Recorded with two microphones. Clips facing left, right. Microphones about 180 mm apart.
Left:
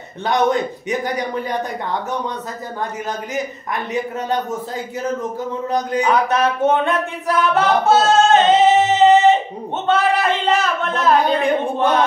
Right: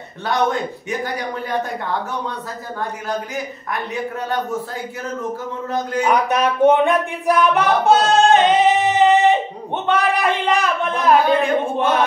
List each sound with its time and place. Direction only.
0.3 s a man's voice: 20° left (ahead or behind)
3.7 s a man's voice: 20° left (ahead or behind)
6.0 s music: 15° right (ahead or behind)
9.8 s a man's voice: 15° right (ahead or behind)
11.2 s a woman's voice: 15° left (ahead or behind)